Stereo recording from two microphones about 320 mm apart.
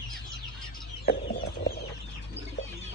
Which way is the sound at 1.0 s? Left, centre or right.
Left.